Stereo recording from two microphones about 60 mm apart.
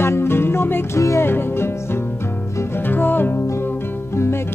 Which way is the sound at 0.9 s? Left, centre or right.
Left.